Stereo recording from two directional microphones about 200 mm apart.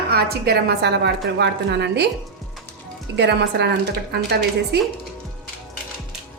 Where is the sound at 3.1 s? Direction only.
60° right (ahead or behind).